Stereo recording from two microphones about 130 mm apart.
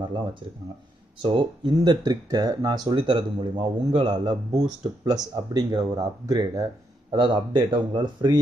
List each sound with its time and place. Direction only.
1.2 s speech: 35° right (ahead or behind)